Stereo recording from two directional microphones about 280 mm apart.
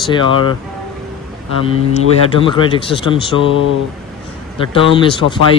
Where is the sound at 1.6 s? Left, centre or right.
Centre.